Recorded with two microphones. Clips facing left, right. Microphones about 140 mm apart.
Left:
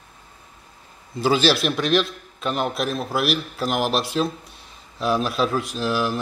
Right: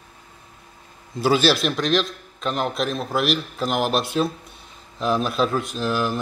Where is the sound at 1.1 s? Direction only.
Centre (ahead or behind).